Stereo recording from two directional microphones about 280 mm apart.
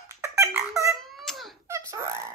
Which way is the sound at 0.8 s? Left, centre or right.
Centre.